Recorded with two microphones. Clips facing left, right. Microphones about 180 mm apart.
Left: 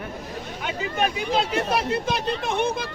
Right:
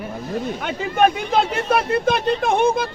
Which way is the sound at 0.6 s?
50° right (ahead or behind).